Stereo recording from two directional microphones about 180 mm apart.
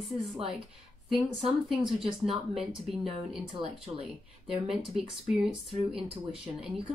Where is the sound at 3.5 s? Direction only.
35° right (ahead or behind).